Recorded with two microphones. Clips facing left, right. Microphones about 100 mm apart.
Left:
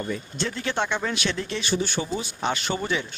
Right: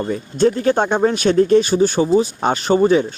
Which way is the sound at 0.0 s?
40° right (ahead or behind).